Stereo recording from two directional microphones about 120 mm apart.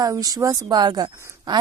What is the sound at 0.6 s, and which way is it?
Speech, 35° right (ahead or behind).